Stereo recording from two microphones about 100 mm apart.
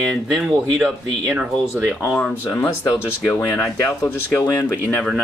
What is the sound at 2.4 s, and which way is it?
Speech, 30° left (ahead or behind).